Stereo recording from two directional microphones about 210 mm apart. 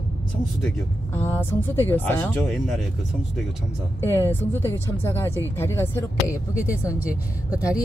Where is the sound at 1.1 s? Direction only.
10° left (ahead or behind).